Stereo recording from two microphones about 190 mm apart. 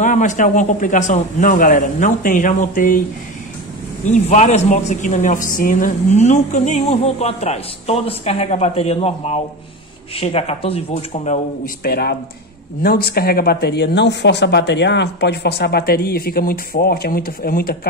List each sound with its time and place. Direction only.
0.0 s speech: 40° left (ahead or behind)
4.0 s a man's voice: 40° left (ahead or behind)
11.6 s speech: 55° left (ahead or behind)